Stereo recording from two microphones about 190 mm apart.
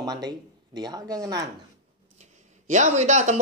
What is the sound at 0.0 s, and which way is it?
Speech, 20° right (ahead or behind).